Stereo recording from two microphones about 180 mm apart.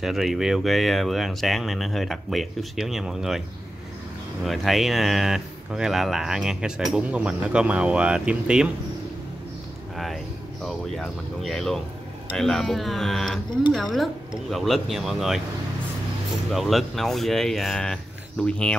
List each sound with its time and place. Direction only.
0.0 s speech: centre (ahead or behind)
4.5 s speech: centre (ahead or behind)
9.9 s speech: centre (ahead or behind)
16.5 s speech: centre (ahead or behind)